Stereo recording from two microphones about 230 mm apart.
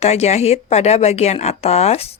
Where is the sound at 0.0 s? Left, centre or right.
Left.